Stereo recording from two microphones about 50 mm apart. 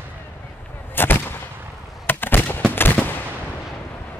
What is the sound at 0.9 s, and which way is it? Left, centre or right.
Gunshot, left.